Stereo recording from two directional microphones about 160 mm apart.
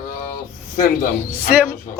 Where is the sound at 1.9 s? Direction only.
55° left (ahead or behind).